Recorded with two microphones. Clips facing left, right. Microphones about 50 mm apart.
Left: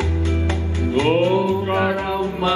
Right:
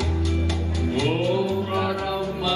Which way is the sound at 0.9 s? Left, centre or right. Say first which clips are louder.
Left 6 dB; left.